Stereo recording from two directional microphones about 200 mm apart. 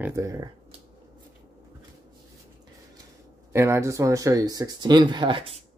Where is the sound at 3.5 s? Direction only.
15° right (ahead or behind).